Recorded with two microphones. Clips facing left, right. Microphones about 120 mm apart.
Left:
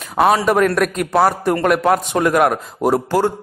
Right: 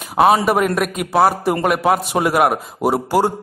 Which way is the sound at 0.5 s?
5° right (ahead or behind).